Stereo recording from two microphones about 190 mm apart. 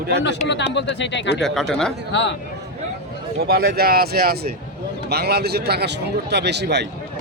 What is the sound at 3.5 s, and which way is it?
A man's voice, 55° right (ahead or behind).